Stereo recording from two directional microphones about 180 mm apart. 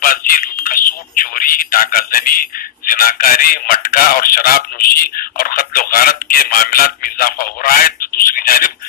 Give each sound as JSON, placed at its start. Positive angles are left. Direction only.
{"t": 0.0, "sound": "a man's voice", "side_deg": 55}